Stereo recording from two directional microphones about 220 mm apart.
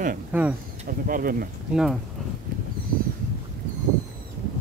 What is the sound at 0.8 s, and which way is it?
Speech, 40° right (ahead or behind).